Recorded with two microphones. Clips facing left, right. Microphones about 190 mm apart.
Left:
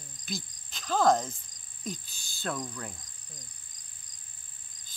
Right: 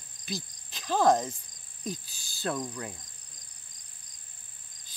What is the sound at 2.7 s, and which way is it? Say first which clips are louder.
Speech: right 3 dB; 15° right (ahead or behind).